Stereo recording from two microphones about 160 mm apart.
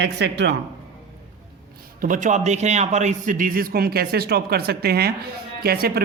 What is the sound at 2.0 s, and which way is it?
A man's voice, 55° right (ahead or behind).